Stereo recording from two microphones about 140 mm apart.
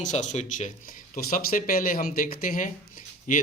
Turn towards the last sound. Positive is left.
turn(degrees=65)  # may be behind; listen again after turning